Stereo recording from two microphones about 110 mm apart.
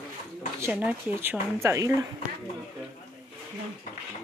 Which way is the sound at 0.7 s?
15° right (ahead or behind).